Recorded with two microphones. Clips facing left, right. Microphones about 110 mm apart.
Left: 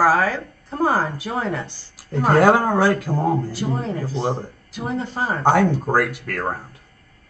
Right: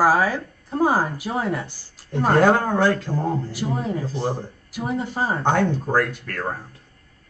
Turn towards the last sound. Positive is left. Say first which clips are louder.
# left 2 dB
turn(degrees=5)  # may be behind; listen again after turning